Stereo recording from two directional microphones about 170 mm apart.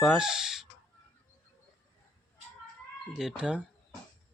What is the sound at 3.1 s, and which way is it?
Speech, 5° right (ahead or behind).